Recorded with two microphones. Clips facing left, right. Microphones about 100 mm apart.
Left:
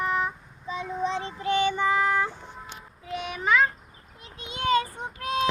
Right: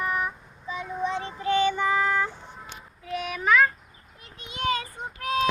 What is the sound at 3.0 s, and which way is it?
Speech, 25° left (ahead or behind).